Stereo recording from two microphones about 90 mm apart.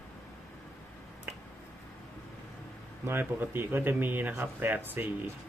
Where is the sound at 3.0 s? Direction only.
25° right (ahead or behind).